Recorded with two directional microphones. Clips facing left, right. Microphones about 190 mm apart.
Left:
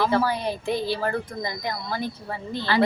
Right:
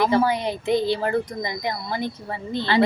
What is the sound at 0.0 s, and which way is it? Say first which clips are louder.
A woman's voice: right 3 dB; 20° right (ahead or behind).